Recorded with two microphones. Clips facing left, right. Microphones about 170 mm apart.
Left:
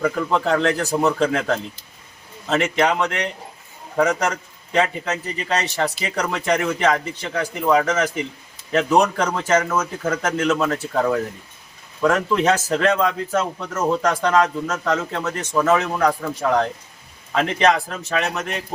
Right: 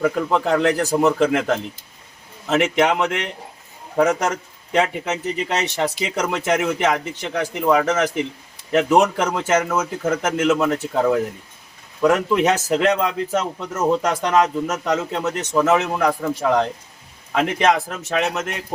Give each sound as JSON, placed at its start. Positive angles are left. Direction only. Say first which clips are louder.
{"t": 0.0, "sound": "a man's voice", "louder": "right 1 dB", "side_deg": -15}